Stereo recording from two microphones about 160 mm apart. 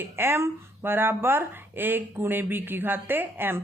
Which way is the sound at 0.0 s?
15° right (ahead or behind).